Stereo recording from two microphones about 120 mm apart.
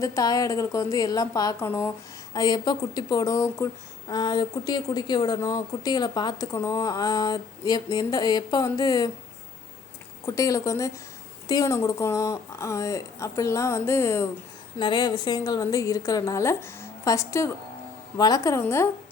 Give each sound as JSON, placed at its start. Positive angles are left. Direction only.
{"t": 0.0, "sound": "a woman's voice", "side_deg": 30}
{"t": 1.5, "sound": "a woman's voice", "side_deg": 20}
{"t": 2.3, "sound": "speech", "side_deg": 35}
{"t": 4.1, "sound": "speech", "side_deg": 35}
{"t": 10.2, "sound": "a woman's voice", "side_deg": 25}
{"t": 14.8, "sound": "a woman's voice", "side_deg": 40}